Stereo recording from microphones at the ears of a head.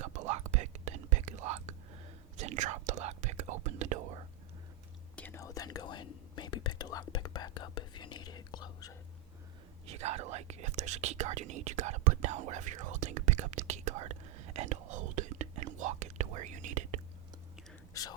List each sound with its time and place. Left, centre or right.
0.0 s whispering: right
5.3 s whispering: left
9.8 s whispering: right